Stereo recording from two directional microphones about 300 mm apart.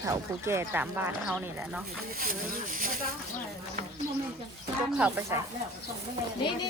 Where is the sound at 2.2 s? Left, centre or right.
Right.